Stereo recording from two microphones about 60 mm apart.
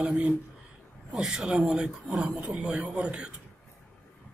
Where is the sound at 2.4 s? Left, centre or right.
Right.